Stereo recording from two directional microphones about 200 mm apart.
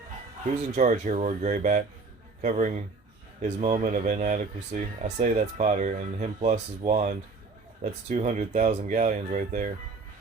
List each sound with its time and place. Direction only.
0.4 s speech: 35° right (ahead or behind)